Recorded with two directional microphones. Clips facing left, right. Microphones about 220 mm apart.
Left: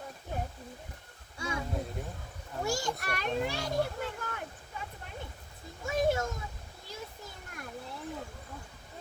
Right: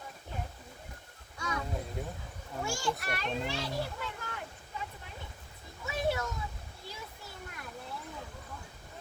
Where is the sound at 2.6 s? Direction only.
40° left (ahead or behind).